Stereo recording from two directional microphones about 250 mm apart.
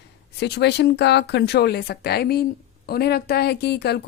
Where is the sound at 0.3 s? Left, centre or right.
Left.